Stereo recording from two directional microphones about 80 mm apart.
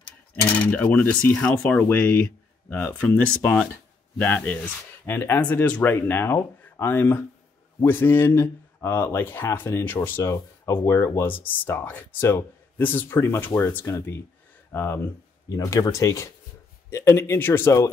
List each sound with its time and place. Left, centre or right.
0.5 s coin: centre
1.9 s speech: left
4.5 s speech: left
10.2 s speech: left
11.2 s speech: left
15.5 s speech: left